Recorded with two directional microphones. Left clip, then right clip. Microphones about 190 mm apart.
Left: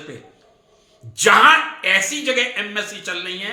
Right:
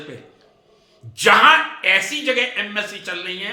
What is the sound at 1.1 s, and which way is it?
Speech, 20° left (ahead or behind).